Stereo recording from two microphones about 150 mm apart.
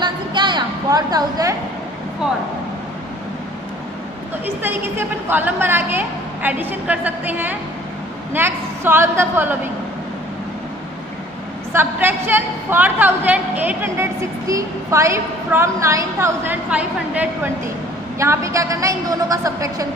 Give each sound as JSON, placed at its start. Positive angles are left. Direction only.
{"t": 0.0, "sound": "a sound", "side_deg": -30}
{"t": 4.6, "sound": "a woman's voice", "side_deg": -15}
{"t": 11.7, "sound": "a woman's voice", "side_deg": -15}